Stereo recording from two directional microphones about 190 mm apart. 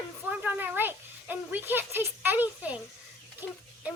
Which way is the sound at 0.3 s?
10° right (ahead or behind).